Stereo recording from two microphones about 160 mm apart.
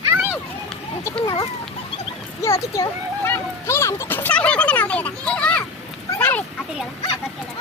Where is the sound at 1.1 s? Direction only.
35° left (ahead or behind).